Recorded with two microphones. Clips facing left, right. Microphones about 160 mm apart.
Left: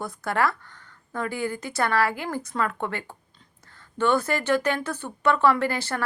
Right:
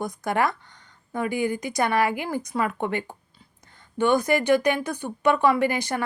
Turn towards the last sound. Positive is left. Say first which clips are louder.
# right 3 dB
turn(degrees=-15)  # may be behind; listen again after turning